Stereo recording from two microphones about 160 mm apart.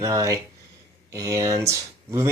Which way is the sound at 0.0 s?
20° right (ahead or behind).